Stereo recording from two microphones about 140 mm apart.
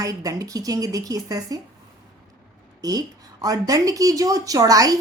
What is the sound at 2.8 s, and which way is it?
Speech, 25° right (ahead or behind).